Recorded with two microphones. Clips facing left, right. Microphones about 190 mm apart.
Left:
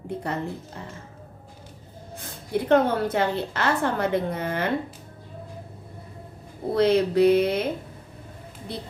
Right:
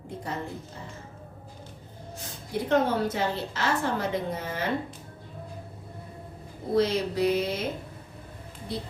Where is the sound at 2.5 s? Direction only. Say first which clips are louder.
Left 4 dB; 55° left (ahead or behind).